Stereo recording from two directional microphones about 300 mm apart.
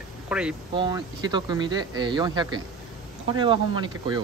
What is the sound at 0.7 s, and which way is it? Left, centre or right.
Speech, centre.